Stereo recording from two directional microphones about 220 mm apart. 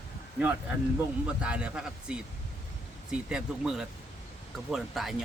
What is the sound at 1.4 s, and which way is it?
Speech, 5° right (ahead or behind).